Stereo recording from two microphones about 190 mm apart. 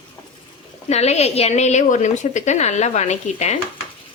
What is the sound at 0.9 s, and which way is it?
Speech, 35° left (ahead or behind).